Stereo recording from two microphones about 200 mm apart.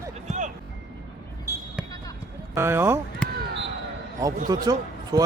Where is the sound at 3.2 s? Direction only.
5° left (ahead or behind).